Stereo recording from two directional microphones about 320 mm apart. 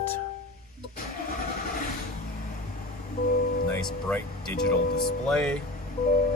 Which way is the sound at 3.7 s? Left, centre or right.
Centre.